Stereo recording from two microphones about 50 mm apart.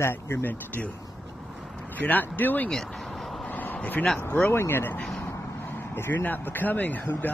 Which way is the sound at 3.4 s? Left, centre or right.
Left.